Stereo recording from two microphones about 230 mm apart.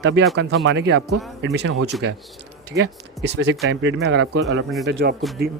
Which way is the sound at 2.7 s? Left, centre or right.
Right.